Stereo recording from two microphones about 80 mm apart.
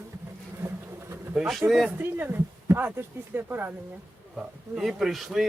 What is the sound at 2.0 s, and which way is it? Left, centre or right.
Speech, right.